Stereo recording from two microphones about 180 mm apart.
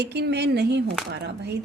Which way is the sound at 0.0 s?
70° right (ahead or behind).